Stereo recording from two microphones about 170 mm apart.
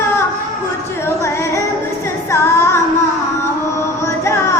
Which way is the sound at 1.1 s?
15° left (ahead or behind).